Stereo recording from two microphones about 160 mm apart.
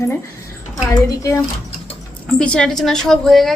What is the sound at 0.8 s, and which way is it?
Speech, 20° left (ahead or behind).